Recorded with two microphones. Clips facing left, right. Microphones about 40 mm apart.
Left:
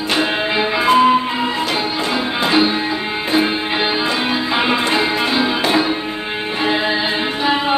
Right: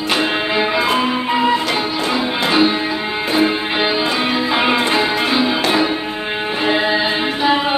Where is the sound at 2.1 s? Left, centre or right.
Centre.